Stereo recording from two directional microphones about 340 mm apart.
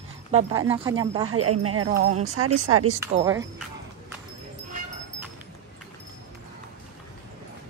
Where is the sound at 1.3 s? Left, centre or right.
Right.